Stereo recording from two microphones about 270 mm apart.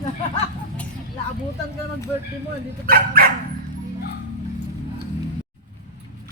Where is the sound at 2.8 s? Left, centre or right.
Right.